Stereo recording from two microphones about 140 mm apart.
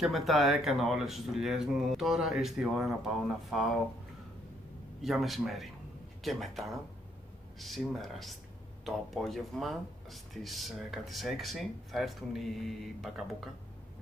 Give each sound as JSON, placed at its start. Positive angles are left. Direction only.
{"t": 0.0, "sound": "speech", "side_deg": 0}
{"t": 5.0, "sound": "speech", "side_deg": 0}